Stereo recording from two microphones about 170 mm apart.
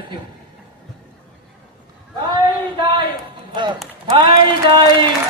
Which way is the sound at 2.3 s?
30° right (ahead or behind).